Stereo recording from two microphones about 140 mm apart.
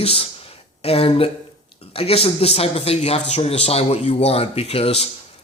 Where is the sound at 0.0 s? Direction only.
45° left (ahead or behind).